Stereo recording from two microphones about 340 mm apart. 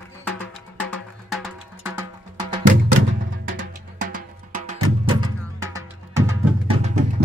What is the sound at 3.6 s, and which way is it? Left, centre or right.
Music, right.